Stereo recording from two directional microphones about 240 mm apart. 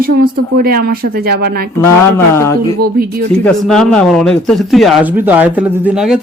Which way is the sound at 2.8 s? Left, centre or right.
Right.